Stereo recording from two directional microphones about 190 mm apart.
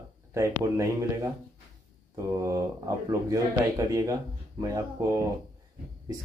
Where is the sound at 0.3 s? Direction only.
15° right (ahead or behind).